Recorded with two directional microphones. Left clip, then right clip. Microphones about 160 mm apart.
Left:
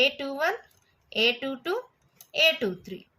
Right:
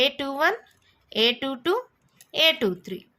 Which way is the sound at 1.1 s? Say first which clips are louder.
Right 2 dB; 45° right (ahead or behind).